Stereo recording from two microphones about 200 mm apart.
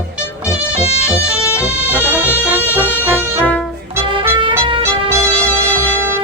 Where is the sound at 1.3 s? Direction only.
15° left (ahead or behind).